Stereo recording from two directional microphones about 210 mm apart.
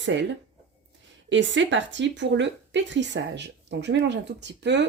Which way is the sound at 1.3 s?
60° right (ahead or behind).